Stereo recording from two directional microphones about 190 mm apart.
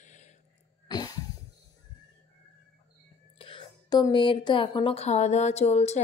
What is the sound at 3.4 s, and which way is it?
A woman's voice, 25° left (ahead or behind).